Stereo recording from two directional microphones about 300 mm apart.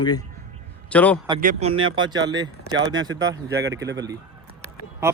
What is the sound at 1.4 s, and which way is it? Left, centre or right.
Speech, right.